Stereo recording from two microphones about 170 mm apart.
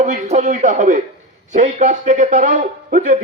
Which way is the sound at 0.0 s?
45° right (ahead or behind).